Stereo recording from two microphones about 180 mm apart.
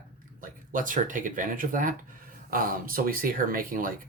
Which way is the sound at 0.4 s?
50° right (ahead or behind).